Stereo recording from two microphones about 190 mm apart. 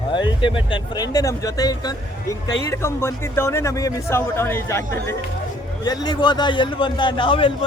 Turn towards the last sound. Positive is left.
turn(degrees=25)  # may be behind; listen again after turning